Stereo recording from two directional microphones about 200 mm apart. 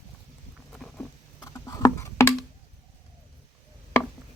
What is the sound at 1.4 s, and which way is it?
Computer keyboard, 15° left (ahead or behind).